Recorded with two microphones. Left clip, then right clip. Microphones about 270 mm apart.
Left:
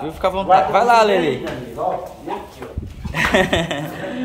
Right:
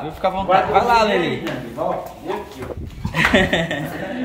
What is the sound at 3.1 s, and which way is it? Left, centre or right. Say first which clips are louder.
Speech: even; centre.